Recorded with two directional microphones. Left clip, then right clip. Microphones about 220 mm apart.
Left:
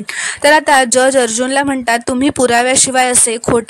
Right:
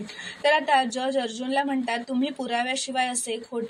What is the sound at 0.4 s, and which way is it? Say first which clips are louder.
Speech: left 12 dB; 55° left (ahead or behind).